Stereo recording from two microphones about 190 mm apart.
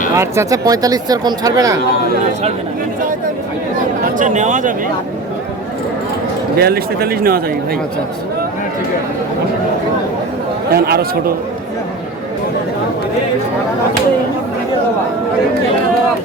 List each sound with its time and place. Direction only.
0.1 s speech: 15° right (ahead or behind)
4.0 s speech: 40° right (ahead or behind)
6.6 s speech: 55° right (ahead or behind)
10.7 s speech: 55° right (ahead or behind)